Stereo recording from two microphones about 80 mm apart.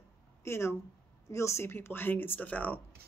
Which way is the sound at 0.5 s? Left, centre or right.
Left.